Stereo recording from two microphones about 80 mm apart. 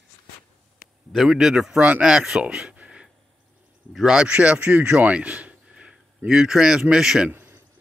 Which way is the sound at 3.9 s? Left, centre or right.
Centre.